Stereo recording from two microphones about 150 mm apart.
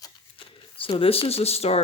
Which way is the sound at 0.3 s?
35° left (ahead or behind).